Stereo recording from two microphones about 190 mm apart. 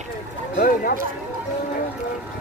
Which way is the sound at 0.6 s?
50° left (ahead or behind).